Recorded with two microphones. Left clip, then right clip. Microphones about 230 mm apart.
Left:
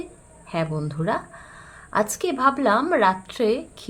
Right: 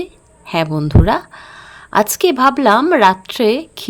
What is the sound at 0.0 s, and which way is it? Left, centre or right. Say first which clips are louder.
A woman's voice: right 10 dB; right.